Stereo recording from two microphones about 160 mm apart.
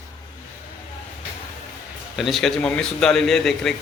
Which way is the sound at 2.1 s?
Centre (ahead or behind).